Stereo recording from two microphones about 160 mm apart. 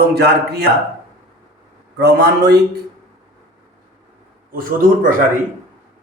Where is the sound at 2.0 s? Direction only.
90° right.